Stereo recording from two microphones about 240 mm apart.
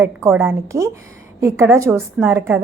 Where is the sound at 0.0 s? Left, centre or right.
Centre.